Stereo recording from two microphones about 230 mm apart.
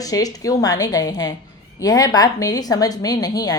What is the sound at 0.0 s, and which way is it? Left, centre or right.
A woman's voice, centre.